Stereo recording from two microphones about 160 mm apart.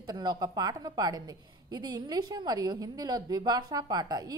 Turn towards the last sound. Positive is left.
turn(degrees=-25)  # may be behind; listen again after turning